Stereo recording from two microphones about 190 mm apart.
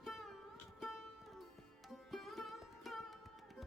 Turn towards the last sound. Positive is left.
turn(degrees=0)  # may be behind; listen again after turning